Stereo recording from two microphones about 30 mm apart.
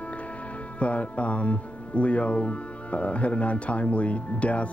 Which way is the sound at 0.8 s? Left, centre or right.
Left.